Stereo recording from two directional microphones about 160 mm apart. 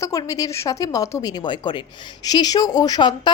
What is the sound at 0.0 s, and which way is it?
A woman's voice, 20° left (ahead or behind).